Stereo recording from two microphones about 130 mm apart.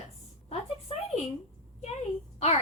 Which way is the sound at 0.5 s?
55° left (ahead or behind).